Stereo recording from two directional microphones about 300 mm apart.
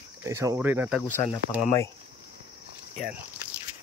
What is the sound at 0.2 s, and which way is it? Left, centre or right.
Speech, centre.